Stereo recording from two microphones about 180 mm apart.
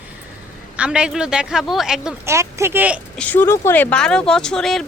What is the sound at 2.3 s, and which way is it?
Speech, 15° right (ahead or behind).